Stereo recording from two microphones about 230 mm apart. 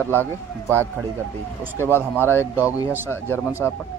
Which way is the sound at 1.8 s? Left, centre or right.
Centre.